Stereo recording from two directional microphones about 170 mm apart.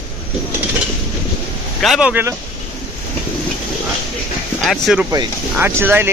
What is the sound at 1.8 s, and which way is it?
Speech, 5° right (ahead or behind).